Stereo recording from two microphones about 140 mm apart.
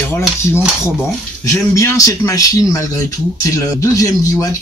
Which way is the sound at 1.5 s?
20° left (ahead or behind).